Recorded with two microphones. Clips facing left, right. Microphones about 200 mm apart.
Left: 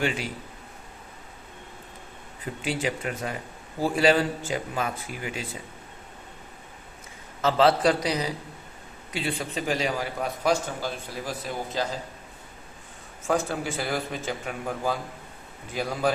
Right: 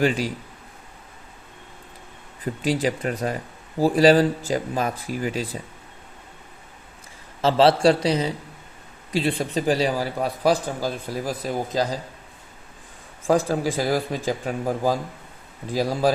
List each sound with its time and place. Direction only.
0.0 s a man's voice: 40° right (ahead or behind)
2.6 s a man's voice: 35° right (ahead or behind)
7.4 s a man's voice: 30° right (ahead or behind)
13.2 s a man's voice: 35° right (ahead or behind)